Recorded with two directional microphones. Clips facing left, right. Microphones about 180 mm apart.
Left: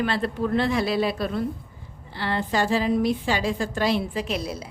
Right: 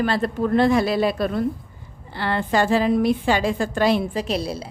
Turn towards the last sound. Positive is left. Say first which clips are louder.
# right 4 dB
turn(degrees=-30)  # may be behind; listen again after turning